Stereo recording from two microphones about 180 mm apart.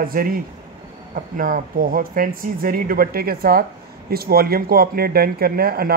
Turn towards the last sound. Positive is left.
turn(degrees=-55)  # may be behind; listen again after turning